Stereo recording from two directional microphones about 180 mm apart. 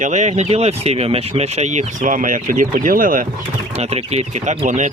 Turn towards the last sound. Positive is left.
turn(degrees=-40)  # may be behind; listen again after turning